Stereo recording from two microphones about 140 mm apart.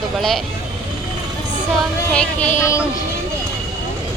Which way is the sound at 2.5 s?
20° left (ahead or behind).